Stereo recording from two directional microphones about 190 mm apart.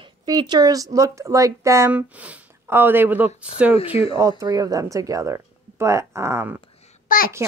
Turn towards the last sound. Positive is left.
turn(degrees=50)  # may be behind; listen again after turning